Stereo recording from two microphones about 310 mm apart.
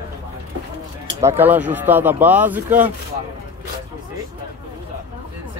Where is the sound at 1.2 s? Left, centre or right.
Centre.